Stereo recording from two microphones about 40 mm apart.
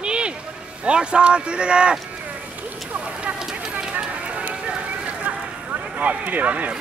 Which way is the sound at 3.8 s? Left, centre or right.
Right.